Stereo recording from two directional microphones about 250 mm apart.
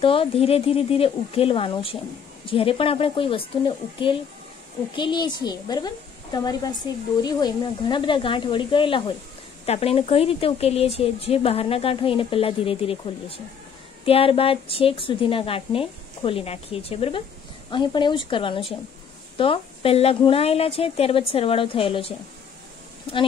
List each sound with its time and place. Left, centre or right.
0.0 s a woman's voice: left